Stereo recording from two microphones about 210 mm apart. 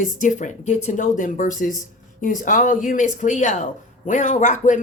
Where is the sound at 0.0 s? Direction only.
40° left (ahead or behind).